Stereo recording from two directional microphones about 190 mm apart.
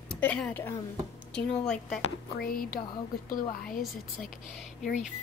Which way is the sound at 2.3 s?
50° left (ahead or behind).